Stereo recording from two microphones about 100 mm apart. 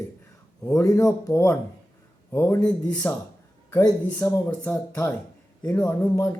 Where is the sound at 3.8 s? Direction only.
40° left (ahead or behind).